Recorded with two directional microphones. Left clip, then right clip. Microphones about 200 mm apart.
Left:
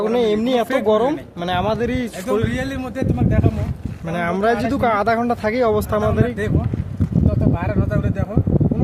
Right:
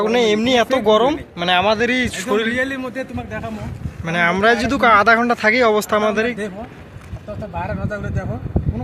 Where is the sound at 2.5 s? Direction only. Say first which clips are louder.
Right 4 dB; 75° left (ahead or behind).